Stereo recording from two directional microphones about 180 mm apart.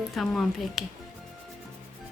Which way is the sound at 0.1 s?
Centre (ahead or behind).